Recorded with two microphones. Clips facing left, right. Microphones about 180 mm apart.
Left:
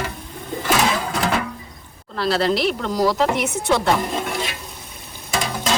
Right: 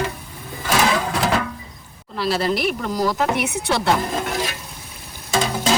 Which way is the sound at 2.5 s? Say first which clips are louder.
Left 2 dB; 30° left (ahead or behind).